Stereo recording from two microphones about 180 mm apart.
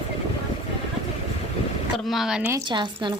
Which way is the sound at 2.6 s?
25° right (ahead or behind).